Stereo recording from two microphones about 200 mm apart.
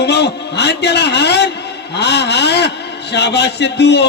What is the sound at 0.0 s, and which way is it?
A man's voice, 55° left (ahead or behind).